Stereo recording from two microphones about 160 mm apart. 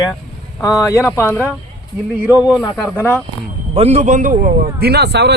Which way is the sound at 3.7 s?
40° right (ahead or behind).